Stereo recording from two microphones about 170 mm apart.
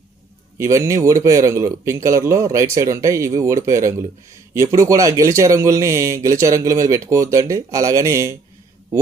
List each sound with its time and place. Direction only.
0.6 s a man's voice: 15° right (ahead or behind)